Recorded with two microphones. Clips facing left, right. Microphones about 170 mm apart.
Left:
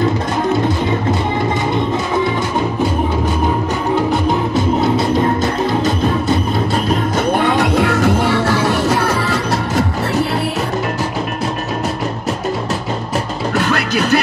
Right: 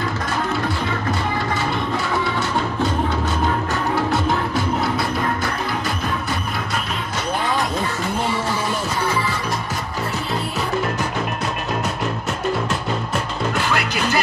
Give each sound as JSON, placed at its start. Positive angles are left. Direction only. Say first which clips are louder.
{"t": 3.9, "sound": "music", "louder": "left 5 dB", "side_deg": 15}
{"t": 7.3, "sound": "music", "louder": "left 6 dB", "side_deg": 70}
{"t": 13.6, "sound": "music", "louder": "left 8 dB", "side_deg": 60}